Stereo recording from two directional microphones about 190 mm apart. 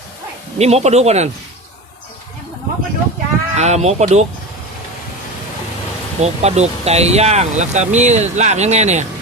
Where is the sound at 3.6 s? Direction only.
35° right (ahead or behind).